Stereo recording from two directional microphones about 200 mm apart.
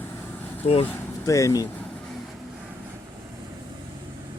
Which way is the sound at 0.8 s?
15° left (ahead or behind).